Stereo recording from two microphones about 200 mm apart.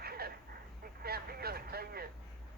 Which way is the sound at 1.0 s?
50° right (ahead or behind).